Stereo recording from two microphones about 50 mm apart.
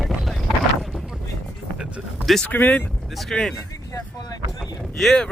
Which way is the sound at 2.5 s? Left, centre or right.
Left.